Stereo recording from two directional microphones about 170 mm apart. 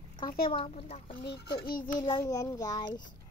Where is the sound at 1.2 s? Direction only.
70° left (ahead or behind).